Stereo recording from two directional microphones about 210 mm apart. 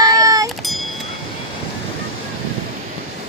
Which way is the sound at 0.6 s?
Centre (ahead or behind).